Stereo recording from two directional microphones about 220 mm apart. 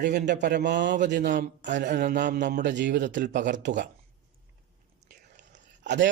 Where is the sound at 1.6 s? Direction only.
50° right (ahead or behind).